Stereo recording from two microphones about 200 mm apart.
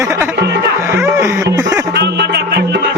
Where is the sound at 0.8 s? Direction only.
15° right (ahead or behind).